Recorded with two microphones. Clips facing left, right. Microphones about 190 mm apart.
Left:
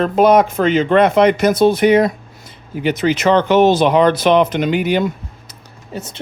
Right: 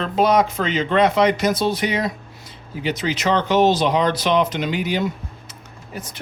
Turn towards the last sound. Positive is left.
turn(degrees=30)  # may be behind; listen again after turning